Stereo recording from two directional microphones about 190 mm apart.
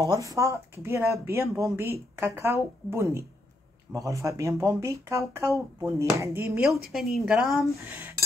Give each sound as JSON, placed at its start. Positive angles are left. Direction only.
{"t": 0.0, "sound": "a woman's voice", "side_deg": -20}